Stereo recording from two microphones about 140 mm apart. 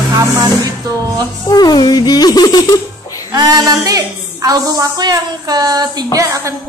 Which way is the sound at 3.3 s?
25° right (ahead or behind).